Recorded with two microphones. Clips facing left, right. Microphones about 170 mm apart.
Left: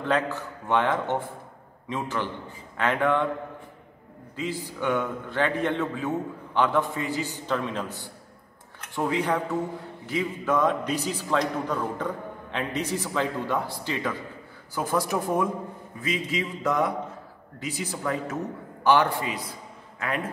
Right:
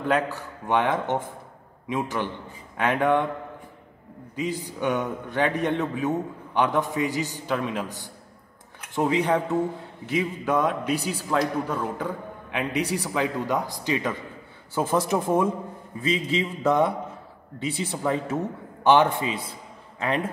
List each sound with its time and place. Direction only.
0.0 s a man's voice: 10° right (ahead or behind)
4.4 s a man's voice: 15° right (ahead or behind)